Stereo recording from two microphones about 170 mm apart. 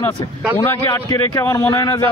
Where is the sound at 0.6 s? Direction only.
15° left (ahead or behind).